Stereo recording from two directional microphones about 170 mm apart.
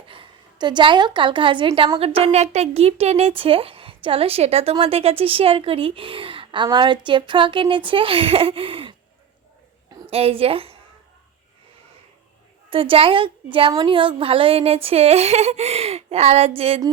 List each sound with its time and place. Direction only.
0.1 s a woman's voice: 30° right (ahead or behind)
10.1 s a woman's voice: 35° right (ahead or behind)
12.7 s a woman's voice: 30° right (ahead or behind)